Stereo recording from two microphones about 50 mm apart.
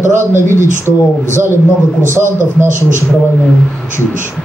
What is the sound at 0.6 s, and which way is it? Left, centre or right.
Speech, left.